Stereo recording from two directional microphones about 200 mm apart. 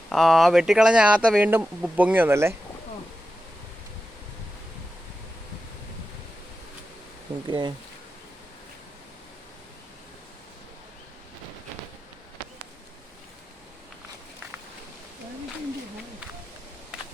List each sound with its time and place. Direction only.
0.1 s speech: centre (ahead or behind)
7.4 s speech: 25° right (ahead or behind)